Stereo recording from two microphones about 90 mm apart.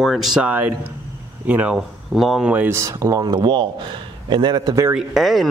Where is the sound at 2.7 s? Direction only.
35° right (ahead or behind).